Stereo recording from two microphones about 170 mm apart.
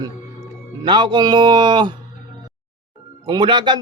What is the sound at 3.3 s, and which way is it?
Speech, 25° right (ahead or behind).